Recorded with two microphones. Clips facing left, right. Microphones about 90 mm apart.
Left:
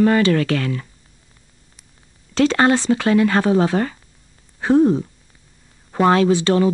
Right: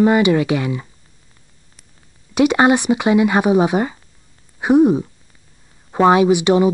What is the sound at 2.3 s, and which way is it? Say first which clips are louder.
Speech: right 2 dB; 15° right (ahead or behind).